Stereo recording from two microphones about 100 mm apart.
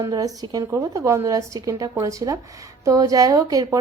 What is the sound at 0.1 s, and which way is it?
A woman's voice, 40° right (ahead or behind).